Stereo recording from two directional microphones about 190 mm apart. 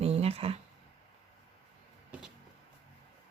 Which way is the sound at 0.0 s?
30° right (ahead or behind).